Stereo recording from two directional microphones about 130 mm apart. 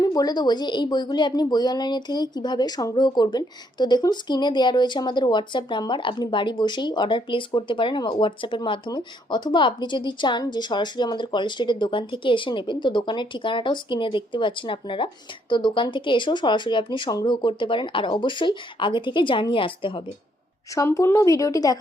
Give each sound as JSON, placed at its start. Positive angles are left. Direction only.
{"t": 0.0, "sound": "a woman's voice", "side_deg": 30}
{"t": 20.7, "sound": "speech", "side_deg": 25}